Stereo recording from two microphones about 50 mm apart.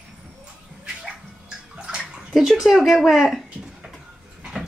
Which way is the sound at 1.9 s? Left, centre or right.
Centre.